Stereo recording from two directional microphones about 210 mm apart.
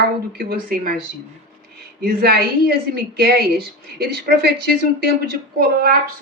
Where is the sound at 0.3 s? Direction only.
45° right (ahead or behind).